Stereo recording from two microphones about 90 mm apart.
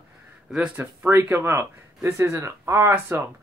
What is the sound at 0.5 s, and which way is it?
Speech, 10° right (ahead or behind).